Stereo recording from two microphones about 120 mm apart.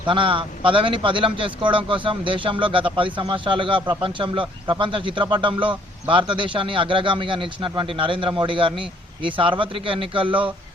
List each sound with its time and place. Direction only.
0.0 s a man's voice: 45° right (ahead or behind)